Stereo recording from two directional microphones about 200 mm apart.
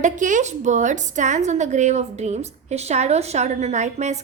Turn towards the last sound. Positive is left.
turn(degrees=-35)  # may be behind; listen again after turning